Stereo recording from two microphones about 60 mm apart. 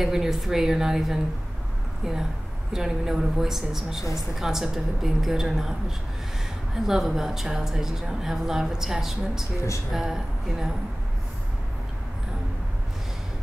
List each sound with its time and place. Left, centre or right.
0.0 s a woman's voice: centre
2.7 s a woman's voice: centre